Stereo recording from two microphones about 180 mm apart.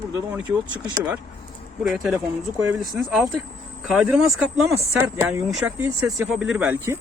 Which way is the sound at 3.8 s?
5° right (ahead or behind).